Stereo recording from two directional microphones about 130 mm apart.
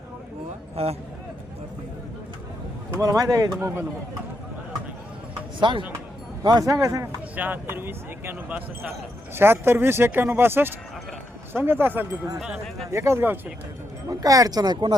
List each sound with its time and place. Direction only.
0.8 s speech: 50° right (ahead or behind)
3.0 s speech: 25° right (ahead or behind)
5.5 s speech: 40° right (ahead or behind); by 7.1 s 25° right (ahead or behind)
7.3 s speech: 15° right (ahead or behind)
12.4 s speech: 5° right (ahead or behind)
12.9 s speech: 20° right (ahead or behind)
14.1 s speech: 25° right (ahead or behind)